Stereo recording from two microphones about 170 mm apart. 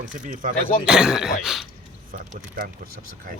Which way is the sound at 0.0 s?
50° right (ahead or behind).